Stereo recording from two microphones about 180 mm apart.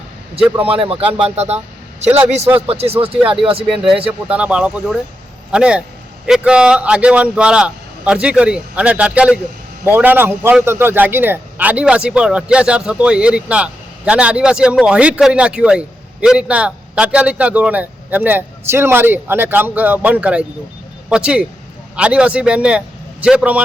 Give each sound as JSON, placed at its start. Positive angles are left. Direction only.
{"t": 0.7, "sound": "speech", "side_deg": -30}
{"t": 3.6, "sound": "a man's voice", "side_deg": -5}